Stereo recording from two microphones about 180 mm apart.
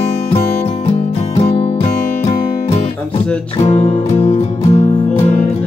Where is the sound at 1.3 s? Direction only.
35° left (ahead or behind).